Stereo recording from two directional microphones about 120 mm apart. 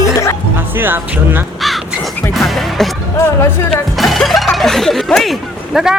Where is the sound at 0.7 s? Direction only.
20° right (ahead or behind).